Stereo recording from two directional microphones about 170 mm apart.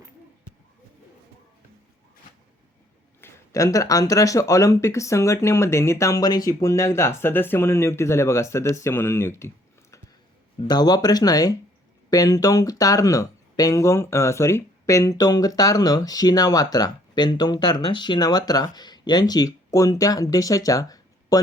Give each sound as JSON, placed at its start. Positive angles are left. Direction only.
{"t": 3.2, "sound": "speech", "side_deg": 15}
{"t": 10.6, "sound": "speech", "side_deg": 25}